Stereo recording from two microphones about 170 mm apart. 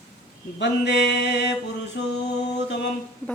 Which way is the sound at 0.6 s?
90° left.